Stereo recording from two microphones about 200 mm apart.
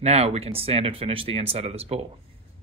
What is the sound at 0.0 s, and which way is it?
Speech, 30° right (ahead or behind).